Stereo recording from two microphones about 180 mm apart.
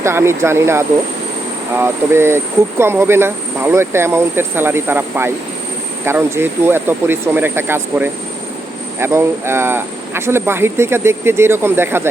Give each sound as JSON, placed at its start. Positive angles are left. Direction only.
{"t": 0.0, "sound": "speech", "side_deg": -15}